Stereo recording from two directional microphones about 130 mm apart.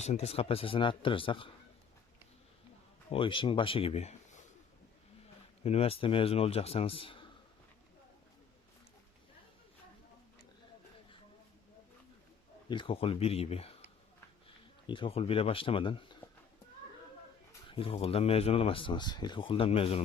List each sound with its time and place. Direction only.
0.0 s speech: 55° left (ahead or behind); by 1.5 s 40° left (ahead or behind)
3.1 s speech: 40° left (ahead or behind); by 4.4 s 60° left (ahead or behind)
5.6 s speech: 50° left (ahead or behind)
12.6 s speech: 40° left (ahead or behind)
14.8 s speech: 40° left (ahead or behind)
17.7 s speech: 45° left (ahead or behind)